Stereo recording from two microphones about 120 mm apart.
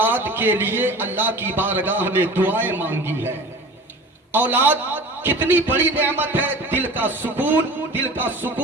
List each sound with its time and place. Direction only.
0.0 s a man's voice: 15° right (ahead or behind)